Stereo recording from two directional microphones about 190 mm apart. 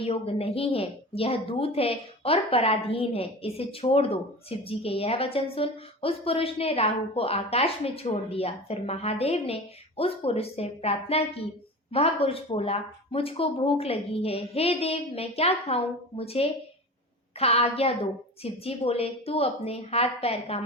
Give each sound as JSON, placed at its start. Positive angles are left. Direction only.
{"t": 0.0, "sound": "a woman's voice", "side_deg": 30}